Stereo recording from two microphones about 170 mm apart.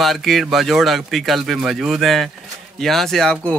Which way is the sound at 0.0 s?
Centre (ahead or behind).